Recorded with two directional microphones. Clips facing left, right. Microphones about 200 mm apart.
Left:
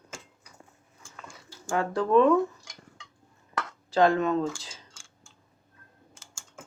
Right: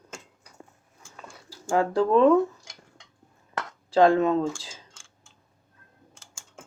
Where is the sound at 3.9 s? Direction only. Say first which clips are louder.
Right 3 dB; 25° right (ahead or behind).